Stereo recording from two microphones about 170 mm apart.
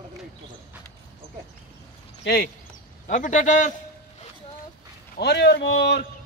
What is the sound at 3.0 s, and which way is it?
Speech, 45° left (ahead or behind).